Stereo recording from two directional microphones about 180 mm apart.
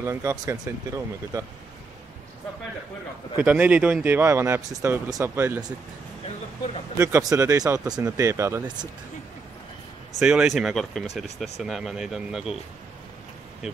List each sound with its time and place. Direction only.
0.0 s speech: 15° right (ahead or behind)
3.3 s speech: 10° right (ahead or behind)
7.0 s speech: 15° right (ahead or behind)
10.1 s speech: 5° right (ahead or behind)